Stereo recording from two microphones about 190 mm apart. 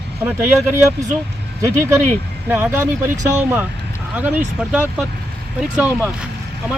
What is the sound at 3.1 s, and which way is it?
Speech, 40° right (ahead or behind).